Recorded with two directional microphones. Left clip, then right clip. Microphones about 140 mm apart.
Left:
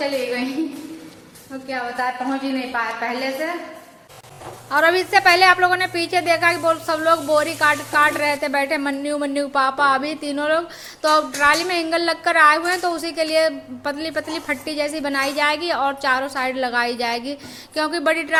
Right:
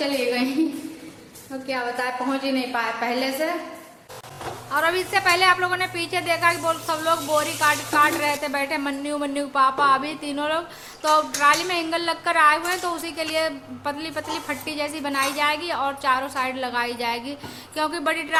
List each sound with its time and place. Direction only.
1.6 s a woman's voice: 10° right (ahead or behind)
4.7 s a woman's voice: 30° left (ahead or behind)